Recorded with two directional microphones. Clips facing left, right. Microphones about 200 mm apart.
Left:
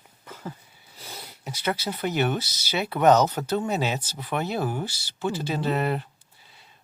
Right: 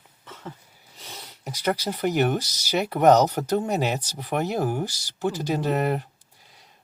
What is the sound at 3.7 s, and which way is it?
Speech, 40° right (ahead or behind).